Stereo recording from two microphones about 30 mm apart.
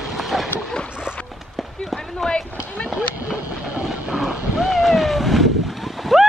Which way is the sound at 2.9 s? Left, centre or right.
Right.